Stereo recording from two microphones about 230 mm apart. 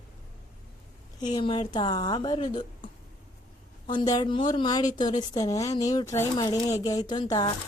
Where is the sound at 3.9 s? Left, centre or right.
Centre.